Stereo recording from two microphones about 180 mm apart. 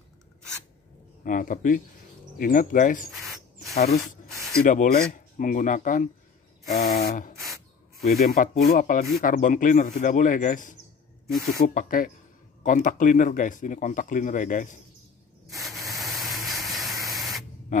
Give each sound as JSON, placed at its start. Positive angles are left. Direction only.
{"t": 1.2, "sound": "speech", "side_deg": 45}
{"t": 3.7, "sound": "a sound", "side_deg": 60}
{"t": 4.6, "sound": "speech", "side_deg": 45}
{"t": 6.8, "sound": "a sound", "side_deg": 60}
{"t": 8.6, "sound": "speech", "side_deg": 50}
{"t": 15.5, "sound": "spray", "side_deg": 0}